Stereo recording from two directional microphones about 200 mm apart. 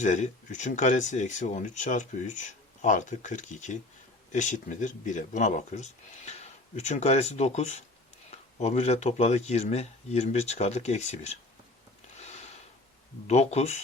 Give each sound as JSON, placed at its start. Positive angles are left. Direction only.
{"t": 0.0, "sound": "speech", "side_deg": 35}
{"t": 12.2, "sound": "a sound", "side_deg": 35}
{"t": 13.2, "sound": "speech", "side_deg": 35}